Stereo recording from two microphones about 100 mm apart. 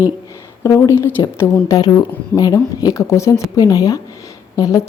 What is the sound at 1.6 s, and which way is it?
A woman's voice, 40° left (ahead or behind).